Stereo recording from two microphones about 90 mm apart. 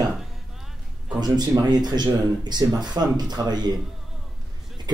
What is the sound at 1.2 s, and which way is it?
Speech, 50° right (ahead or behind).